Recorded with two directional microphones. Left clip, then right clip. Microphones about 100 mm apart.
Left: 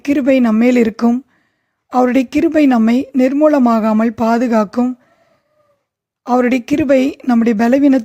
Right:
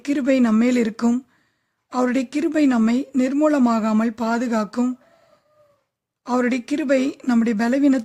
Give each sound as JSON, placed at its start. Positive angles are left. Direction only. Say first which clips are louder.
{"t": 0.0, "sound": "a woman's voice", "louder": "left 7 dB", "side_deg": 35}
{"t": 6.2, "sound": "speech", "louder": "left 8 dB", "side_deg": 35}